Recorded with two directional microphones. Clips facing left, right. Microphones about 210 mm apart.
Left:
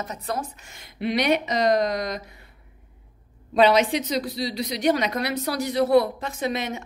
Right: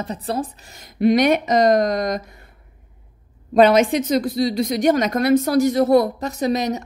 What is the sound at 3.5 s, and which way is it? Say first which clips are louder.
A woman's voice: right 5 dB; 50° right (ahead or behind).